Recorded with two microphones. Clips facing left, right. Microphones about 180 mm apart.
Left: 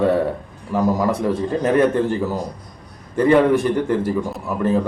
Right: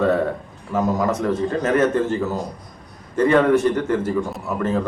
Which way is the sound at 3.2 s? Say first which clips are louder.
Left 1 dB; 10° left (ahead or behind).